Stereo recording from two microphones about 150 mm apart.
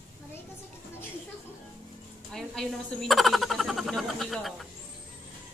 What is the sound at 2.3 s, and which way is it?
Speech, centre (ahead or behind).